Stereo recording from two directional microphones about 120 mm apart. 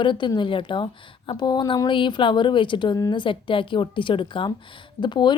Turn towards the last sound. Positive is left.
turn(degrees=40)  # may be behind; listen again after turning